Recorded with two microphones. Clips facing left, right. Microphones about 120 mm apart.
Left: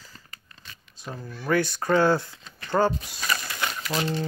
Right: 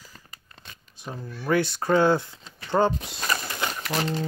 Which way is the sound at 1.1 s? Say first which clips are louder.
Right 1 dB; centre (ahead or behind).